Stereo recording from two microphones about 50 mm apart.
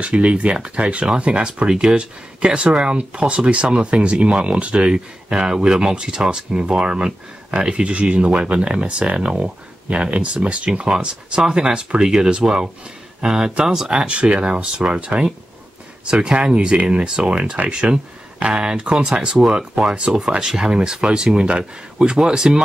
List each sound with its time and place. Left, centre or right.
0.0 s speech: right